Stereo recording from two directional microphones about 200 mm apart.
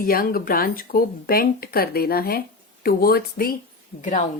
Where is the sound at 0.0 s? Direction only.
45° left (ahead or behind).